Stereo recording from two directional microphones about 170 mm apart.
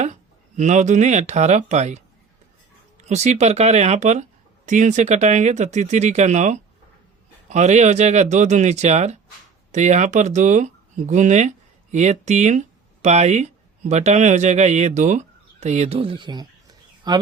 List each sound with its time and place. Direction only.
0.0 s speech: 45° right (ahead or behind)
3.1 s speech: 40° right (ahead or behind); by 17.2 s 25° right (ahead or behind)